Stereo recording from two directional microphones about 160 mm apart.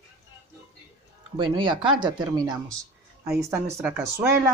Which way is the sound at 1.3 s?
30° right (ahead or behind).